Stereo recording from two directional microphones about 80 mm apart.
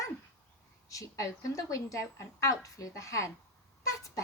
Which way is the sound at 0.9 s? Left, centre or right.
Left.